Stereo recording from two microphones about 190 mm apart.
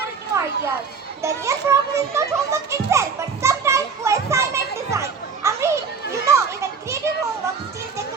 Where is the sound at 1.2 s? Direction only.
15° right (ahead or behind).